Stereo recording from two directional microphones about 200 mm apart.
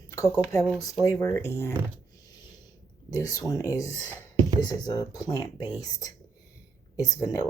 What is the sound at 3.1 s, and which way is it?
Speech, 15° left (ahead or behind).